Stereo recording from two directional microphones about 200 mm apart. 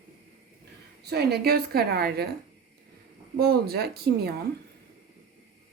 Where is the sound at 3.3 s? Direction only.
50° right (ahead or behind).